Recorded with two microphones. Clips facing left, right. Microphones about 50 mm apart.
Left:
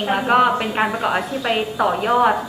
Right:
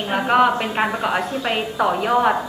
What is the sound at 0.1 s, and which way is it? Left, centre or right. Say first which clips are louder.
A woman's voice: even; centre.